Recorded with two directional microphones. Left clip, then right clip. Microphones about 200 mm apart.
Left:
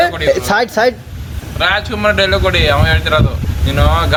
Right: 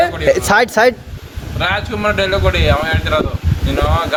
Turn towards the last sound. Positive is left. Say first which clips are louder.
# left 2 dB
turn(degrees=10)  # may be behind; listen again after turning